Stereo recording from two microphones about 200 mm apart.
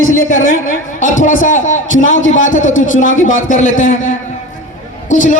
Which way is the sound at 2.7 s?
80° left.